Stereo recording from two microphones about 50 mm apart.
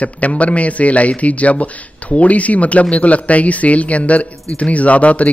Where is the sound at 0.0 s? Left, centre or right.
Left.